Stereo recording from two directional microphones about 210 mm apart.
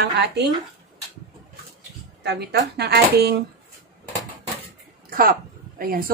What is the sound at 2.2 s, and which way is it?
A woman's voice, 50° right (ahead or behind).